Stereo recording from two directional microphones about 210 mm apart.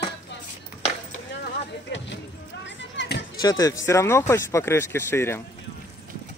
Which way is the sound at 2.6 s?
55° left (ahead or behind).